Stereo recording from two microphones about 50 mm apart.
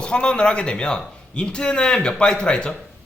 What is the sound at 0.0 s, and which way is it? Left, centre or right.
A man's voice, centre.